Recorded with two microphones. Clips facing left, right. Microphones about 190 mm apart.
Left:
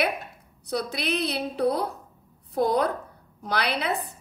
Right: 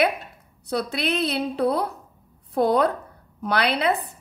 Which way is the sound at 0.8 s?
60° right (ahead or behind).